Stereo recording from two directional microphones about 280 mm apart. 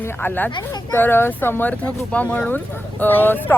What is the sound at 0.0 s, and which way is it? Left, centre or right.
Speech, centre.